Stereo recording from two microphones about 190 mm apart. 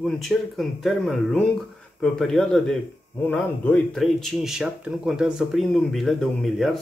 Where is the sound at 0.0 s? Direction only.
Centre (ahead or behind).